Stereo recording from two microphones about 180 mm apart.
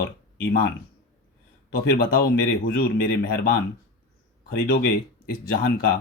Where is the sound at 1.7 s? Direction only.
55° left (ahead or behind).